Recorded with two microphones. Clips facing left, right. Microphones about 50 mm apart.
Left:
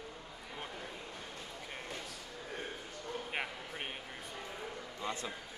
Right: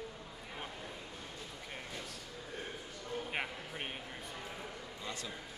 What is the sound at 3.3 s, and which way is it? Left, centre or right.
Speech, centre.